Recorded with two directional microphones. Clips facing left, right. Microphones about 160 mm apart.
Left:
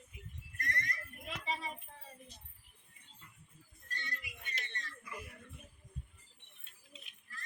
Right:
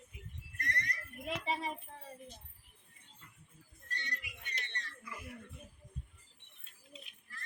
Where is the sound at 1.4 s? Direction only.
60° right (ahead or behind).